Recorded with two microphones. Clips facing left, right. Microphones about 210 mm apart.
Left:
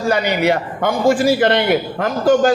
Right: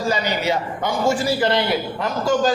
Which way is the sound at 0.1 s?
60° left (ahead or behind).